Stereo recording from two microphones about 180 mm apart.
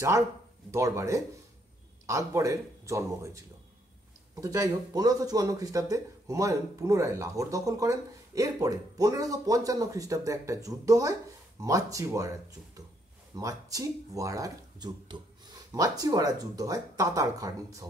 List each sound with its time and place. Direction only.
0.7 s a man's voice: 15° right (ahead or behind)